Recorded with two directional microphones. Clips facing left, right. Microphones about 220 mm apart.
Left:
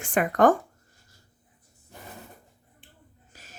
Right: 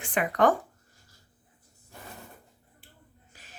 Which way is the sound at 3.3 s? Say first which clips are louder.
Left 2 dB; 40° left (ahead or behind).